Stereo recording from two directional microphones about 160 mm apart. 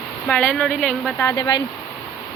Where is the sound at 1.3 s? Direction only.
25° left (ahead or behind).